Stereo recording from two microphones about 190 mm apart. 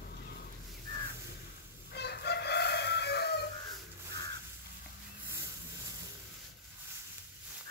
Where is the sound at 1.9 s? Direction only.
60° left (ahead or behind).